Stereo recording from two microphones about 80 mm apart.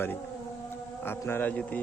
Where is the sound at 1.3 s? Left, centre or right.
Left.